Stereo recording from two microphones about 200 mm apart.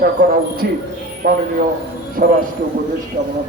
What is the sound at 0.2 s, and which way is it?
A man's voice, 50° right (ahead or behind).